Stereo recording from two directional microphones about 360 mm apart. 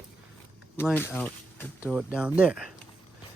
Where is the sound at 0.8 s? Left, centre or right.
Centre.